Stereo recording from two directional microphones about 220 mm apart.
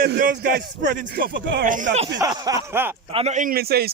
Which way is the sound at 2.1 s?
15° right (ahead or behind).